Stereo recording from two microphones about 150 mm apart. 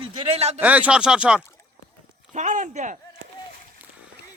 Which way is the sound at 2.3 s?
55° right (ahead or behind).